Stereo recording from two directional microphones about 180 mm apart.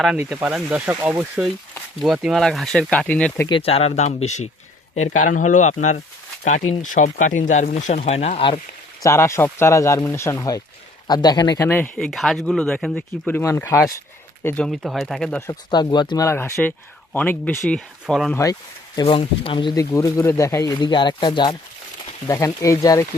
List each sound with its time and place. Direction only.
0.0 s speech: 10° right (ahead or behind); by 3.4 s 10° left (ahead or behind)
3.6 s speech: 35° left (ahead or behind)
9.0 s speech: 15° left (ahead or behind)
15.4 s speech: 20° left (ahead or behind); by 18.3 s centre (ahead or behind)
18.9 s speech: 30° left (ahead or behind)